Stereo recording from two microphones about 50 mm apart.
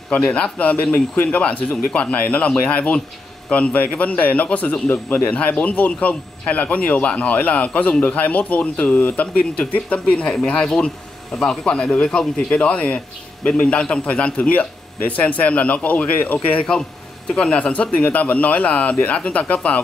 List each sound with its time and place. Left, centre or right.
0.1 s a man's voice: left
10.2 s a man's voice: centre; by 16.6 s left
17.3 s a man's voice: centre